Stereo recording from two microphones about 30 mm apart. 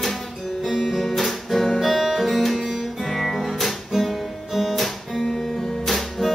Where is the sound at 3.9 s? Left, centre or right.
Centre.